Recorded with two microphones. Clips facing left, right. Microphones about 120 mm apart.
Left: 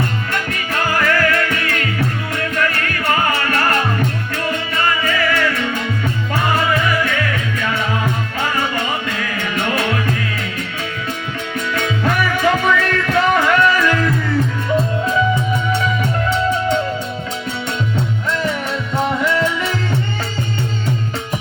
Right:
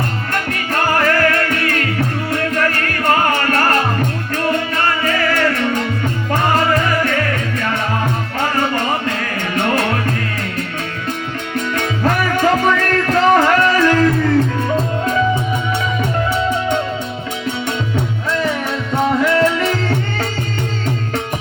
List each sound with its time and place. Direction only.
0.3 s music: 45° right (ahead or behind)
11.7 s music: 40° right (ahead or behind)
19.2 s music: 55° right (ahead or behind)